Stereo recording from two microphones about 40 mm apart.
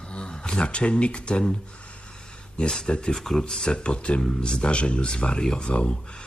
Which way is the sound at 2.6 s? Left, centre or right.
Left.